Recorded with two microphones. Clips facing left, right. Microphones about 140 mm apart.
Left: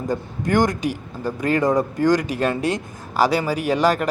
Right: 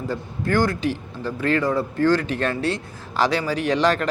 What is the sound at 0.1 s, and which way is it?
Speech, 15° left (ahead or behind).